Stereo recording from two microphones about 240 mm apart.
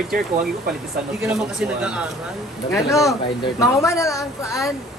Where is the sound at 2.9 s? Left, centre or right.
Centre.